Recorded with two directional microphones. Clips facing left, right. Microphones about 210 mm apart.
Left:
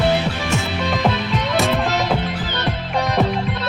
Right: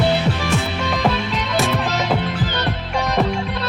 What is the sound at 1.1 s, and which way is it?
Music, centre (ahead or behind).